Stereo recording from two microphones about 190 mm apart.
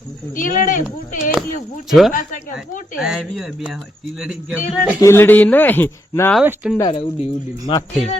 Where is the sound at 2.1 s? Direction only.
45° left (ahead or behind).